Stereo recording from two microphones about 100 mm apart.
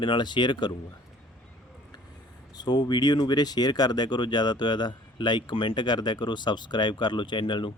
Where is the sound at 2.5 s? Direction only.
45° left (ahead or behind).